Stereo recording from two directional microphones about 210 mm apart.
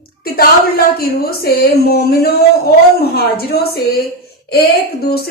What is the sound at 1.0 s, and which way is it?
Speech, 45° left (ahead or behind).